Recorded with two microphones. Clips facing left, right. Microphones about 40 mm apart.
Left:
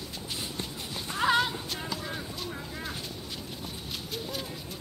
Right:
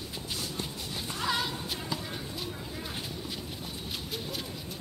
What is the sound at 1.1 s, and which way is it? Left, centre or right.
Music, left.